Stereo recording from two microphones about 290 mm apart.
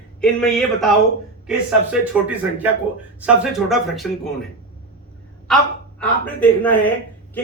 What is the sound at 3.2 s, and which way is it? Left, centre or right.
A man's voice, centre.